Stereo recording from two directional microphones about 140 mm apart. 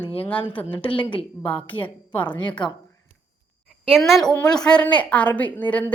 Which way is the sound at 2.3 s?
35° left (ahead or behind).